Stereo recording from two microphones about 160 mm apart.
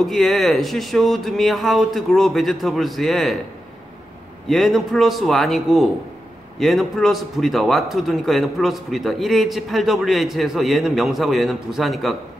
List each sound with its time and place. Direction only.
0.0 s a man's voice: centre (ahead or behind)
4.5 s a man's voice: centre (ahead or behind)